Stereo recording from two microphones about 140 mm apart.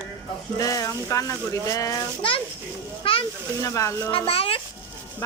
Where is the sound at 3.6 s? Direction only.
20° left (ahead or behind).